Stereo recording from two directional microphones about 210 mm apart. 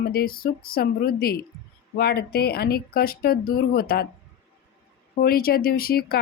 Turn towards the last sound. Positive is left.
turn(degrees=45)  # may be behind; listen again after turning